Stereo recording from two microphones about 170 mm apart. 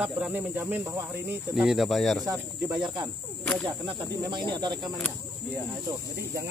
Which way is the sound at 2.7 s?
25° right (ahead or behind).